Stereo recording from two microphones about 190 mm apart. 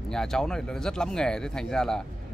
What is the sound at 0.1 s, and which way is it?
Speech, 5° left (ahead or behind).